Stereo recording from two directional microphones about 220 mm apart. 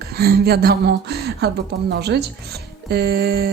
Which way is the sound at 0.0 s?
45° right (ahead or behind).